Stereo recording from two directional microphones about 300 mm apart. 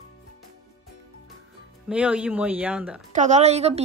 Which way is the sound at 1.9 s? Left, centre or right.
Centre.